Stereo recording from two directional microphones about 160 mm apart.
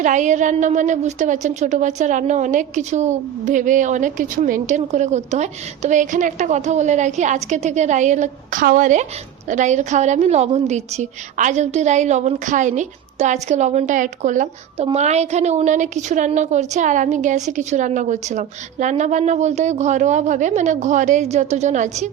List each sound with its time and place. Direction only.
0.0 s a woman's voice: 50° right (ahead or behind)